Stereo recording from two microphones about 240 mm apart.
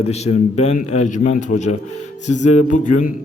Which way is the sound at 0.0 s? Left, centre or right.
Left.